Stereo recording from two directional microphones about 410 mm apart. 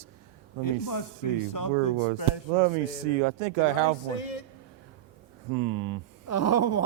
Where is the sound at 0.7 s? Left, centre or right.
Left.